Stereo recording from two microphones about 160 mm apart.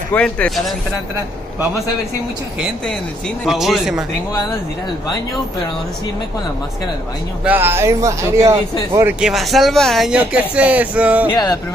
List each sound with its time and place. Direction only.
0.1 s speech: 5° left (ahead or behind)
3.4 s speech: centre (ahead or behind)
7.4 s speech: 15° right (ahead or behind)
9.2 s speech: centre (ahead or behind)
11.3 s music: 25° left (ahead or behind)